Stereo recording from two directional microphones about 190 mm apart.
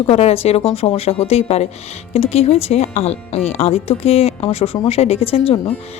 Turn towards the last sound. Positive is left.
turn(degrees=25)  # may be behind; listen again after turning